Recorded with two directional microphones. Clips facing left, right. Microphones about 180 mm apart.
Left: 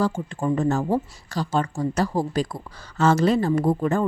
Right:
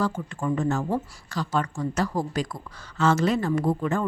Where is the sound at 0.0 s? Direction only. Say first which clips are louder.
Left 3 dB; 30° left (ahead or behind).